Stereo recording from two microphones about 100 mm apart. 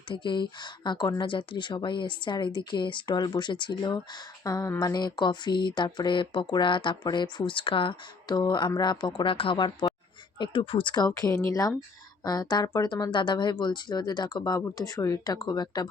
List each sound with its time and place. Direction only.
0.1 s speech: 50° left (ahead or behind)
8.3 s speech: 50° left (ahead or behind)
10.9 s speech: 40° left (ahead or behind)